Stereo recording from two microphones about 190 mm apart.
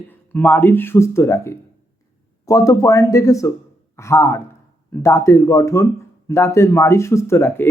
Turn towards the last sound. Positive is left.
turn(degrees=15)  # may be behind; listen again after turning